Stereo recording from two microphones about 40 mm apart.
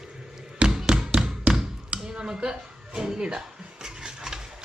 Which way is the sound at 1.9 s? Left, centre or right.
Right.